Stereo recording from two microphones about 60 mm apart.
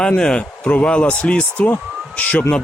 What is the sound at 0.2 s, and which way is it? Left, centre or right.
Speech, centre.